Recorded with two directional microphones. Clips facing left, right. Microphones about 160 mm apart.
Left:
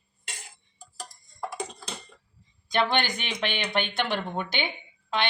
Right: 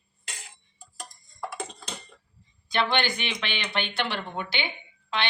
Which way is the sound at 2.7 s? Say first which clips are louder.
Left 1 dB; 45° left (ahead or behind).